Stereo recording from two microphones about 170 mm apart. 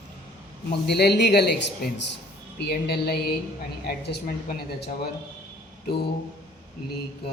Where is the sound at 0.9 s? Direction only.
75° left (ahead or behind).